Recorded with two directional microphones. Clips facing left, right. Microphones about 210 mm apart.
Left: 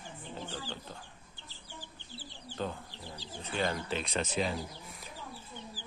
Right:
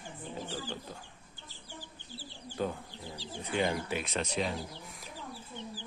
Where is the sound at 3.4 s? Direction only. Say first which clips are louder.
Right 2 dB; 15° right (ahead or behind).